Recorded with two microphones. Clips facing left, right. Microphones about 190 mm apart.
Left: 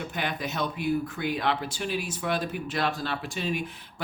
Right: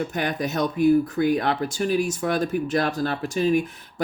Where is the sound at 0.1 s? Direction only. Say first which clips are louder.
Right 6 dB; 45° right (ahead or behind).